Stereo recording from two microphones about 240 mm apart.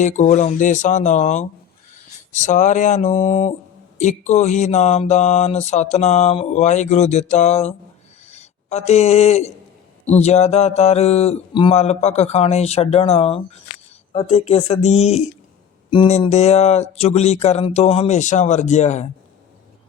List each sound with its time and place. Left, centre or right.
0.0 s speech: left
3.9 s mantra: left
8.3 s speech: left
10.1 s mantra: left